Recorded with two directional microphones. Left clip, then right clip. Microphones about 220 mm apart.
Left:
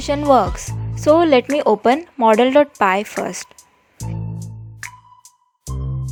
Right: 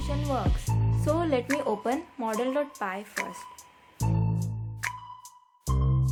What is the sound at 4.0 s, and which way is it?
Music, centre (ahead or behind).